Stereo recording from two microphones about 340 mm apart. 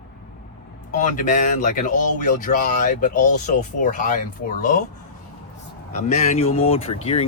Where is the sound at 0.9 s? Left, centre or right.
Left.